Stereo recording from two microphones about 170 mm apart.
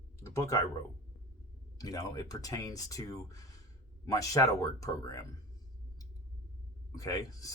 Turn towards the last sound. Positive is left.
turn(degrees=20)  # may be behind; listen again after turning